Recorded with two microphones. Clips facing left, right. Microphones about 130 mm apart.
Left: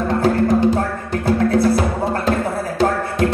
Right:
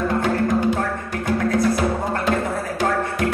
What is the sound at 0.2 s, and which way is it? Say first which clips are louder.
Music: left 4 dB; 35° left (ahead or behind).